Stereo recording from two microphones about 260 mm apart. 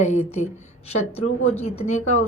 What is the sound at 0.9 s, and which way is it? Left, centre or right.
Speech, left.